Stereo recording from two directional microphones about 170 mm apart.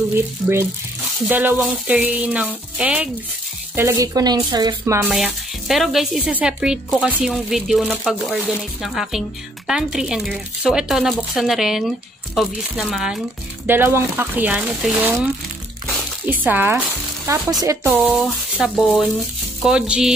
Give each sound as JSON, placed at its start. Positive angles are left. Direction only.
{"t": 1.3, "sound": "speech", "side_deg": -10}
{"t": 3.7, "sound": "speech", "side_deg": -15}
{"t": 5.1, "sound": "speech", "side_deg": 0}
{"t": 13.7, "sound": "speech", "side_deg": -15}
{"t": 16.3, "sound": "speech", "side_deg": -10}
{"t": 17.3, "sound": "speech", "side_deg": -20}